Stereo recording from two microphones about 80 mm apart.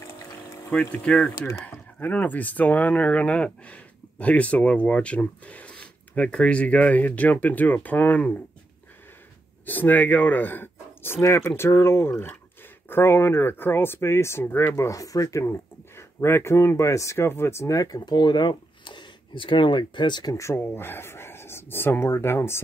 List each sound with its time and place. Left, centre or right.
0.7 s speech: centre
1.5 s speech: left
9.7 s speech: left
14.9 s speech: left
18.0 s speech: left
20.3 s speech: left